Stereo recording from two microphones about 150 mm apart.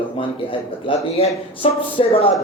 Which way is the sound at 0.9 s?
40° left (ahead or behind).